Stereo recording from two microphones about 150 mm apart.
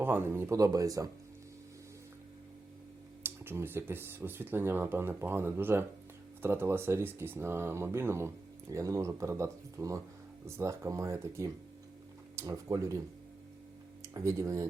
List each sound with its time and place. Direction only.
0.0 s speech: 15° right (ahead or behind)
3.2 s speech: 15° right (ahead or behind)
14.0 s speech: 20° right (ahead or behind)